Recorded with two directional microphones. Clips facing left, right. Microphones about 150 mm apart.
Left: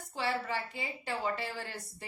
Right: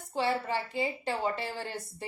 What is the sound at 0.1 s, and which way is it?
A woman's voice, 30° right (ahead or behind).